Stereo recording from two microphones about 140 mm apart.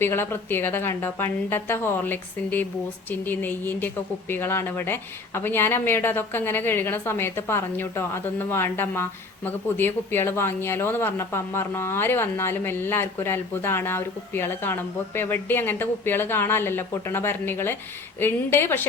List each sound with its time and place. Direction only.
0.0 s speech: 15° left (ahead or behind)